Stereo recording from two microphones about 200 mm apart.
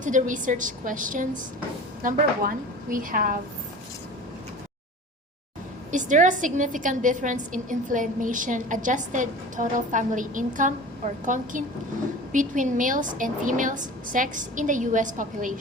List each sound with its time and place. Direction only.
0.0 s a woman's voice: 40° right (ahead or behind)
5.9 s a woman's voice: 40° right (ahead or behind)